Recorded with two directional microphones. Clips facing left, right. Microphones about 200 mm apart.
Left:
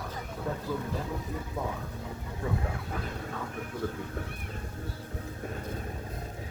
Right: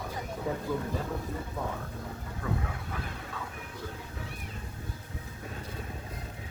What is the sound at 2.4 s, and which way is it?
Speech, 25° left (ahead or behind).